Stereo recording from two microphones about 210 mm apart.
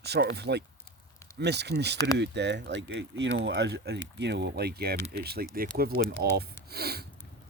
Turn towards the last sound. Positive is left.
turn(degrees=-50)  # may be behind; listen again after turning